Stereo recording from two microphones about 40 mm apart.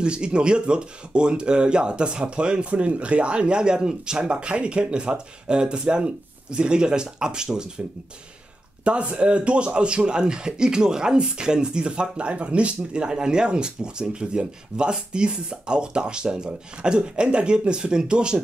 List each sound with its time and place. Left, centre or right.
0.0 s speech: right
8.8 s speech: right